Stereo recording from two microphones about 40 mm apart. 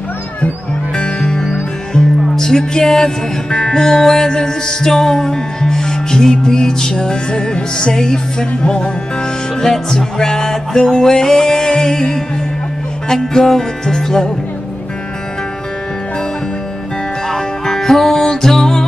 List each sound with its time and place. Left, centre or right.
0.9 s music: left
17.3 s music: centre